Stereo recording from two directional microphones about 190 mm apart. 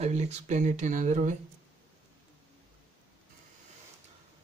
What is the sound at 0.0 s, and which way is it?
Speech, 35° right (ahead or behind).